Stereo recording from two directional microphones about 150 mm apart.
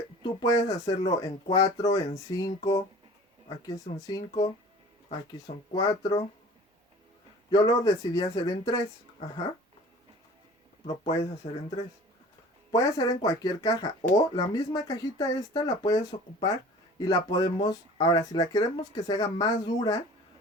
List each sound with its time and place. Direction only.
0.2 s speech: 25° left (ahead or behind)
7.5 s speech: 25° left (ahead or behind)
10.8 s speech: 25° left (ahead or behind)
12.7 s speech: 20° left (ahead or behind)